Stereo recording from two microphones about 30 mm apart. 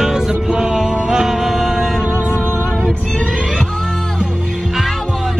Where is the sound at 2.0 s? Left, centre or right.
Right.